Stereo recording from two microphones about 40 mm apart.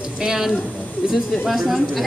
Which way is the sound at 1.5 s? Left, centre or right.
Centre.